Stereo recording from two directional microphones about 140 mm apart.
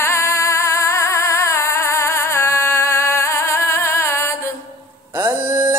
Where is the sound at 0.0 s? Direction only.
20° left (ahead or behind).